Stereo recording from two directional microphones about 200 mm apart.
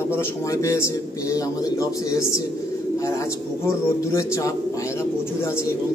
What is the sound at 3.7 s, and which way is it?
Speech, 15° left (ahead or behind).